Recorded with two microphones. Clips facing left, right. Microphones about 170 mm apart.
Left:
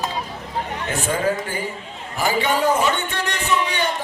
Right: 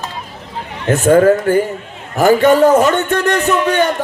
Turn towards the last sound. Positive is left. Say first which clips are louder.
# right 8 dB
turn(degrees=-50)  # may be behind; listen again after turning